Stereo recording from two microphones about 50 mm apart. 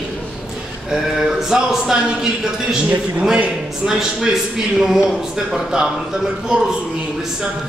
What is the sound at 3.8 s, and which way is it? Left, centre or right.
Speech, centre.